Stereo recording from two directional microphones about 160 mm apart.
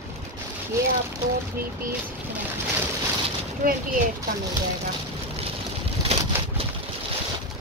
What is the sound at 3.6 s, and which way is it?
Speech, 60° right (ahead or behind).